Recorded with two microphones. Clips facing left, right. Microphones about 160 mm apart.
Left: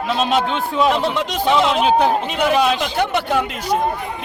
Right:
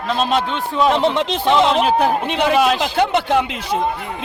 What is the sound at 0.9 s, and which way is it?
Speech, 20° right (ahead or behind).